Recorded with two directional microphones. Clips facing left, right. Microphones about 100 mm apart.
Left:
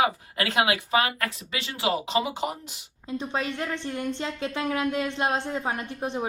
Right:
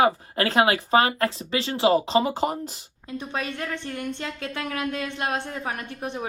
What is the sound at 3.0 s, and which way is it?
Speech, 20° left (ahead or behind).